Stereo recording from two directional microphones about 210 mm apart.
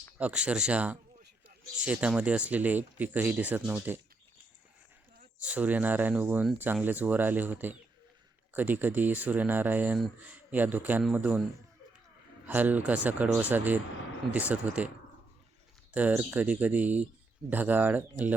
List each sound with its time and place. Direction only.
0.2 s speech: 5° right (ahead or behind)
5.4 s speech: 5° right (ahead or behind)
12.5 s speech: 10° right (ahead or behind)
15.9 s speech: 5° right (ahead or behind)